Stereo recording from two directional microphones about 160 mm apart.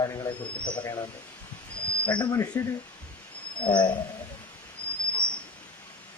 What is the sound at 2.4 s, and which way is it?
Speech, 15° left (ahead or behind).